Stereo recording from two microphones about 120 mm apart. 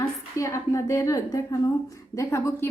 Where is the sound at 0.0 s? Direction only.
25° left (ahead or behind).